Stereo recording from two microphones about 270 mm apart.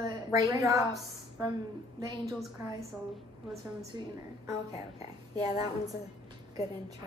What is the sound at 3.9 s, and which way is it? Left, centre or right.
A woman's voice, centre.